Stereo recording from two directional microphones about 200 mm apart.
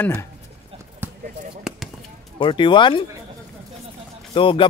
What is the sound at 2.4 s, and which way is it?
Speech, 25° left (ahead or behind).